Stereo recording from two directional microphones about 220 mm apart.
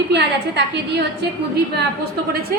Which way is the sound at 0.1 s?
50° right (ahead or behind).